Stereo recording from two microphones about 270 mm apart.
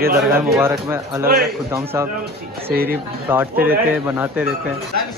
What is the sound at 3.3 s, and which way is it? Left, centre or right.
Speech, centre.